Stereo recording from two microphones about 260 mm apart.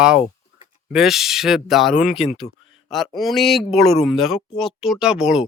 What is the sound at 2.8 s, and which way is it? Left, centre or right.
Speech, centre.